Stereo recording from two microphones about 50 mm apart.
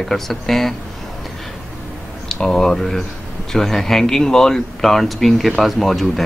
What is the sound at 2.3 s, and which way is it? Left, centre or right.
Speech, centre.